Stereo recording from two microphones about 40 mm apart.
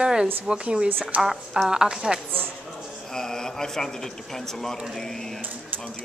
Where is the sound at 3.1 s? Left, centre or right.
Centre.